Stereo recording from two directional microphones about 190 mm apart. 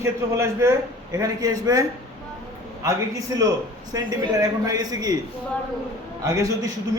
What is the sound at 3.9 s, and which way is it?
A man's voice, 20° right (ahead or behind).